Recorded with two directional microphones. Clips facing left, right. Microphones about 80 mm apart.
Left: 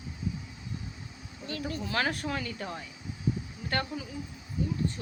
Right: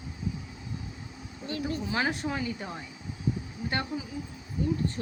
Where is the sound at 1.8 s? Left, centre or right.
Centre.